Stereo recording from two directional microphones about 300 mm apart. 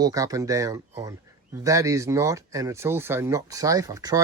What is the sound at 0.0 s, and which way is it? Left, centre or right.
Speech, centre.